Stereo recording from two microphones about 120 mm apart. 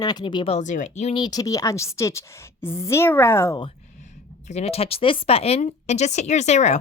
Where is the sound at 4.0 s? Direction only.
80° left.